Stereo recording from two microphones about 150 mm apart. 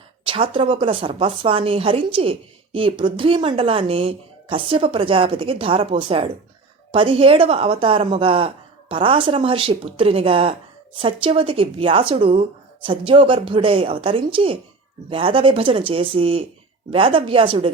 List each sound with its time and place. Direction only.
0.3 s a woman's voice: 35° right (ahead or behind)